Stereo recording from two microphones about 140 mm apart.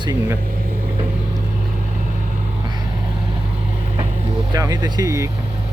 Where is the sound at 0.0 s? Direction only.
25° right (ahead or behind).